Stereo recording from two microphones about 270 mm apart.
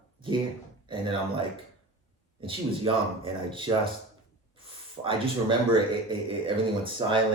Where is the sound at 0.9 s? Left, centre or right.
Centre.